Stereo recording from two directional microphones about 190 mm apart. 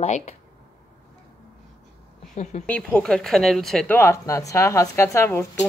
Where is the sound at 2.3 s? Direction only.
40° left (ahead or behind).